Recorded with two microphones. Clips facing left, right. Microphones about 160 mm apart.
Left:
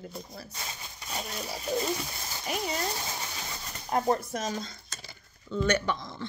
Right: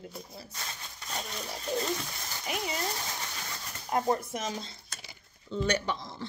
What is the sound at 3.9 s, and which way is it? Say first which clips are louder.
Speech: left 2 dB; 30° left (ahead or behind).